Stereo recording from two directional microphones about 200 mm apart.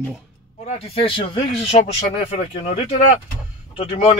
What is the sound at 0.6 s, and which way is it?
Speech, 30° left (ahead or behind).